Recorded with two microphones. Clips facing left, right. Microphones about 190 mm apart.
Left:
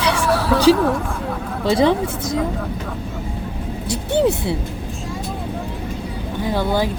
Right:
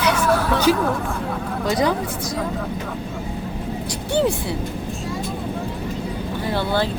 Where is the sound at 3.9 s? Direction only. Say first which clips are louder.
Left 3 dB; 20° left (ahead or behind).